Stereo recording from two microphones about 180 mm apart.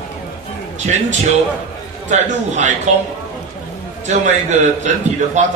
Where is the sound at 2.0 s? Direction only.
40° right (ahead or behind).